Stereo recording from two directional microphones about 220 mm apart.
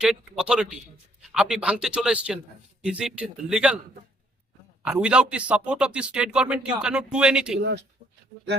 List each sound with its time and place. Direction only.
0.0 s speech: 5° right (ahead or behind)
4.9 s speech: 5° right (ahead or behind)